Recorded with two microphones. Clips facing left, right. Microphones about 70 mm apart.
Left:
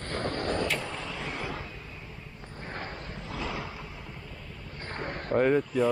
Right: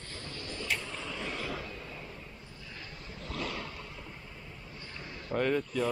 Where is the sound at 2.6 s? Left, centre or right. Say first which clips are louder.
Left 10 dB; left.